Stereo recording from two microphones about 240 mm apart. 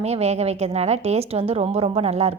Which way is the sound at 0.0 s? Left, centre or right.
Right.